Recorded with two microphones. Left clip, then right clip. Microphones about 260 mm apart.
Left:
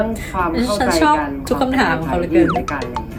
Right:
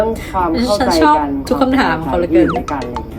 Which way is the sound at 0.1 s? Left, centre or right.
Centre.